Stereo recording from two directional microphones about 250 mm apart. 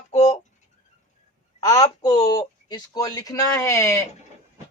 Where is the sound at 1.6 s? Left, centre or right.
Centre.